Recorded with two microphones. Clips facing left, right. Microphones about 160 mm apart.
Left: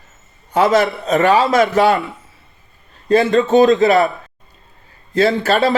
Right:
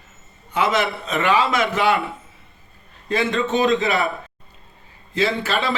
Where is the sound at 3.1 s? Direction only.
40° left (ahead or behind).